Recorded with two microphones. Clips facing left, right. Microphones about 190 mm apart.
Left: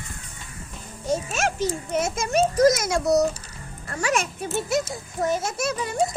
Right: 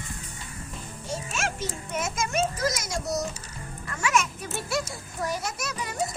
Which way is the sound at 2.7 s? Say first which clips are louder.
Left 9 dB; 60° left (ahead or behind).